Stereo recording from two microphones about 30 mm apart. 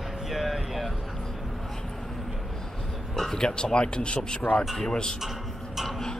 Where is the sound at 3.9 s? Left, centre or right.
Left.